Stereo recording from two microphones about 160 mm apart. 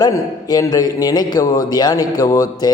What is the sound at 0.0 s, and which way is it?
A man's voice, 25° left (ahead or behind).